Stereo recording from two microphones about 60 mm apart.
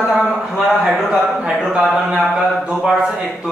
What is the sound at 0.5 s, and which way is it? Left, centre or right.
Speech, centre.